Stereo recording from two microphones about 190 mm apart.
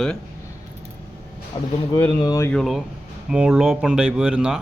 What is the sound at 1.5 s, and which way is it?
Speech, 25° left (ahead or behind).